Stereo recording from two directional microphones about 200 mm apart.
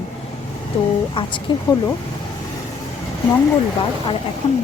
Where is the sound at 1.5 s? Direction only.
25° left (ahead or behind).